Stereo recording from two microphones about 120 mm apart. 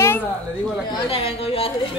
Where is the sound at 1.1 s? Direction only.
55° left (ahead or behind).